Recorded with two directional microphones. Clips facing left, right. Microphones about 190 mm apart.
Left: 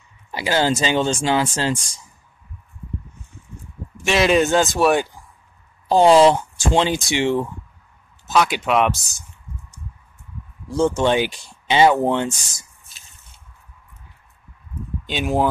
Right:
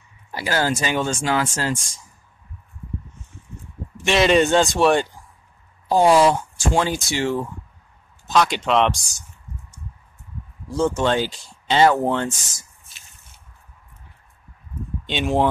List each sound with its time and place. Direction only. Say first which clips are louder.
0.3 s speech: left 3 dB; 20° left (ahead or behind)
3.9 s speech: even; centre (ahead or behind)
5.9 s speech: left 3 dB; 25° left (ahead or behind)
8.3 s speech: even; 5° left (ahead or behind)
10.8 s speech: left 2 dB; 15° left (ahead or behind)
15.0 s speech: even; centre (ahead or behind)